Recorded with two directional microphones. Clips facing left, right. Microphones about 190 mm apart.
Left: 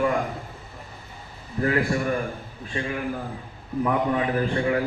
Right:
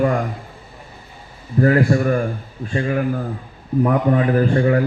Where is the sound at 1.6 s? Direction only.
40° right (ahead or behind).